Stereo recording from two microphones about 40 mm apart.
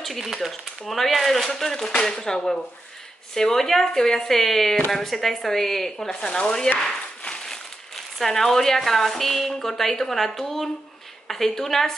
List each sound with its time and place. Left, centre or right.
0.0 s speech: centre
1.9 s speech: left
6.8 s a sound: centre
7.4 s speech: centre